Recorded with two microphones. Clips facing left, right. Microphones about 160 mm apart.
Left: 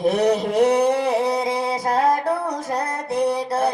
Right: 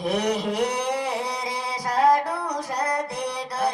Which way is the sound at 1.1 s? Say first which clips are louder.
Left 8 dB; 25° left (ahead or behind).